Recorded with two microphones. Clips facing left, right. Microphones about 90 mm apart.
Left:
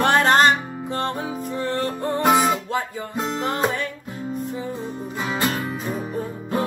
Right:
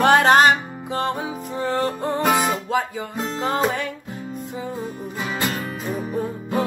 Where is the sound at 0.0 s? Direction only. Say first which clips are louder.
Right 2 dB; 15° right (ahead or behind).